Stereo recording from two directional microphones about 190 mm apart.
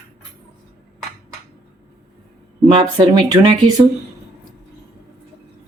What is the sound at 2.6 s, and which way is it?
Speech, 25° right (ahead or behind).